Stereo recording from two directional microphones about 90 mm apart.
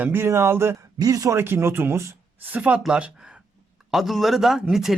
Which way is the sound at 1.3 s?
25° right (ahead or behind).